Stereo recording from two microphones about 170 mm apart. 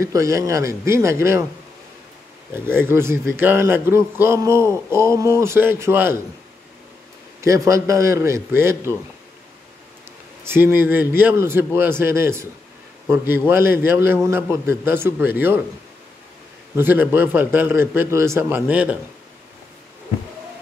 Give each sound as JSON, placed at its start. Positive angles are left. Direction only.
{"t": 0.0, "sound": "a man's voice", "side_deg": -15}
{"t": 2.5, "sound": "a man's voice", "side_deg": -15}
{"t": 7.4, "sound": "a man's voice", "side_deg": -20}
{"t": 10.4, "sound": "a man's voice", "side_deg": -15}
{"t": 16.7, "sound": "a man's voice", "side_deg": -10}